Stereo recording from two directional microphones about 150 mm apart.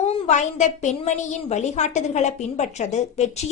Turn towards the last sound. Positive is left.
turn(degrees=50)  # may be behind; listen again after turning